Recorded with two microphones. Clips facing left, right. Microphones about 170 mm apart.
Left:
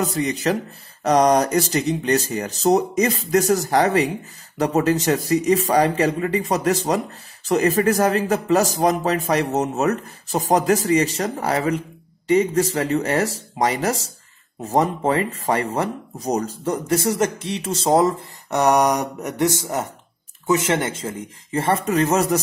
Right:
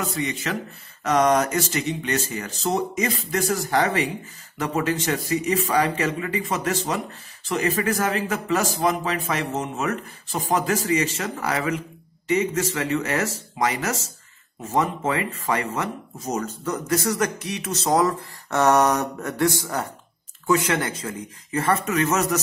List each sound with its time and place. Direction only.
0.0 s a man's voice: 40° left (ahead or behind)